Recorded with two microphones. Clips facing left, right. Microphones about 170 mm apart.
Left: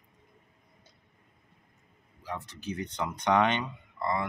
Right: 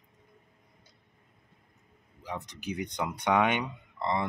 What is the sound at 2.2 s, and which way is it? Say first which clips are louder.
Speech: even; 15° right (ahead or behind).